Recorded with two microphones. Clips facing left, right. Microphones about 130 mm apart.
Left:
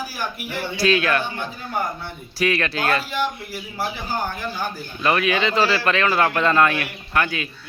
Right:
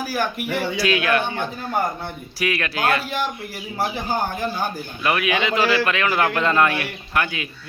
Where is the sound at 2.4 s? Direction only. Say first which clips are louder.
Left 1 dB; 10° right (ahead or behind).